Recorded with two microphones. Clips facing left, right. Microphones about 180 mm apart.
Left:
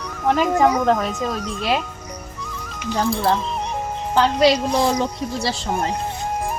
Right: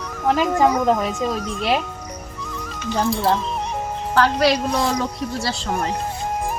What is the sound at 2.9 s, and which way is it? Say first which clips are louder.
Speech: even; 5° right (ahead or behind).